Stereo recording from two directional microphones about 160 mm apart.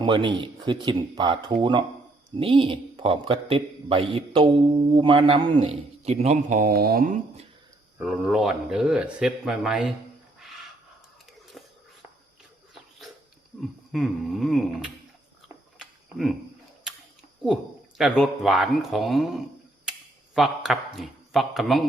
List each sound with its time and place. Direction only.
0.0 s a man's voice: 30° right (ahead or behind); by 7.2 s 65° right (ahead or behind)
7.9 s a man's voice: 5° right (ahead or behind)
11.6 s a sound: centre (ahead or behind)
13.6 s a man's voice: centre (ahead or behind)
15.4 s cricket: 10° right (ahead or behind)
17.4 s a man's voice: 5° right (ahead or behind)